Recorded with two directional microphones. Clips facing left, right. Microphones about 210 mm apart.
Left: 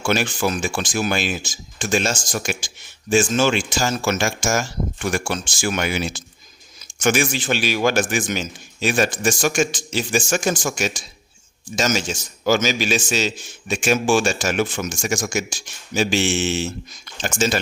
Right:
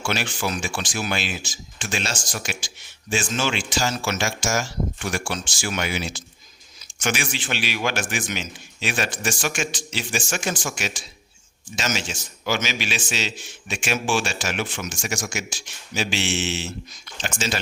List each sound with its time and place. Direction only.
0.0 s a man's voice: 45° left (ahead or behind)